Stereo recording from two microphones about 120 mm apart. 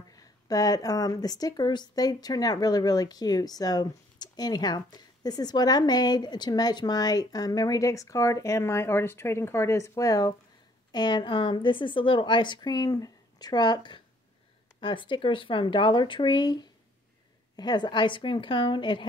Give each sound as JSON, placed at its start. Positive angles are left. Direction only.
{"t": 0.2, "sound": "speech", "side_deg": 30}